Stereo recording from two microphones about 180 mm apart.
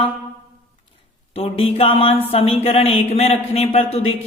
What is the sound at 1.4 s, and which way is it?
A man's voice, 30° left (ahead or behind).